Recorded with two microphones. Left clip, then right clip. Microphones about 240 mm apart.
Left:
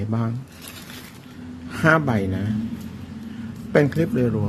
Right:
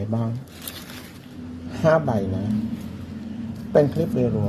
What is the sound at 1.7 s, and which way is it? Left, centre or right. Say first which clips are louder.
Speech: left 1 dB; left.